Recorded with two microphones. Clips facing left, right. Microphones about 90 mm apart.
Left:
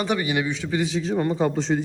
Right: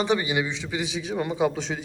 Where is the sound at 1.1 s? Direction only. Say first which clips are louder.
Left 1 dB; 5° right (ahead or behind).